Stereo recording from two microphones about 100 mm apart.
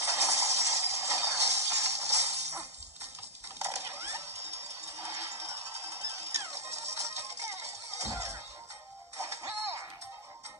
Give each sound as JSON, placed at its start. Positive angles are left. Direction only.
{"t": 0.1, "sound": "music", "side_deg": -30}
{"t": 3.5, "sound": "a sound", "side_deg": -30}
{"t": 4.5, "sound": "music", "side_deg": -30}